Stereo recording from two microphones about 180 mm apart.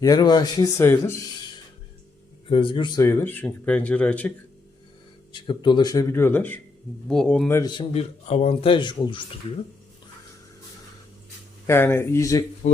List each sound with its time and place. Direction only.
0.0 s speech: 20° left (ahead or behind)
2.5 s speech: 30° left (ahead or behind)
3.0 s speech: 10° left (ahead or behind)
5.3 s speech: 25° left (ahead or behind); by 7.5 s 5° left (ahead or behind)
7.5 s speech: 25° left (ahead or behind)
11.6 s speech: 15° left (ahead or behind)